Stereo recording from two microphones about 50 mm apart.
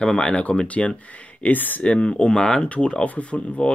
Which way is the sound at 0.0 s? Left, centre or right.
Centre.